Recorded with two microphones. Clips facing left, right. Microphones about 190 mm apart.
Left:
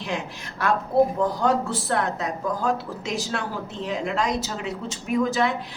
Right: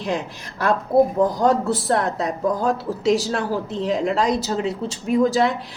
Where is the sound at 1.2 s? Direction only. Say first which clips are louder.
Right 4 dB; 35° right (ahead or behind).